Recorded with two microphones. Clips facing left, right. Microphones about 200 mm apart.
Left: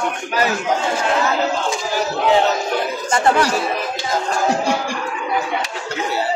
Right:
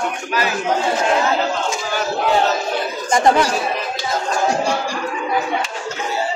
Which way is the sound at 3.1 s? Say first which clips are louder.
Right 2 dB; 15° right (ahead or behind).